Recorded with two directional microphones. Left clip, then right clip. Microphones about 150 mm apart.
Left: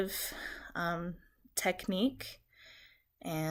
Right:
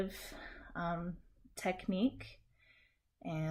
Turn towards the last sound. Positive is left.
turn(degrees=20)  # may be behind; listen again after turning